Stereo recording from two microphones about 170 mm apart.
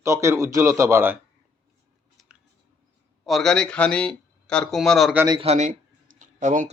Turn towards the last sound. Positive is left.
turn(degrees=-45)  # may be behind; listen again after turning